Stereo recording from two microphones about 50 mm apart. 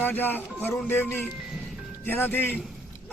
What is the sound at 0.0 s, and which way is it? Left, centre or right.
A man's voice, left.